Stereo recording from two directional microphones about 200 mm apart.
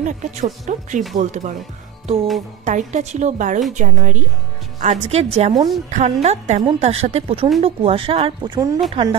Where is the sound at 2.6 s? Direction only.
35° right (ahead or behind).